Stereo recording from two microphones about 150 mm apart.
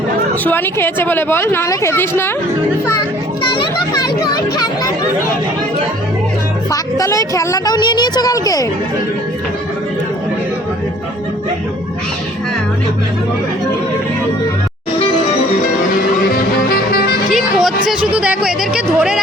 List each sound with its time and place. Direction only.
0.4 s a woman's voice: 15° left (ahead or behind)
3.4 s a woman's voice: 30° left (ahead or behind)
6.7 s a woman's voice: 20° left (ahead or behind)
16.6 s music: 90° left
17.3 s music: centre (ahead or behind)
18.0 s speech: 10° right (ahead or behind)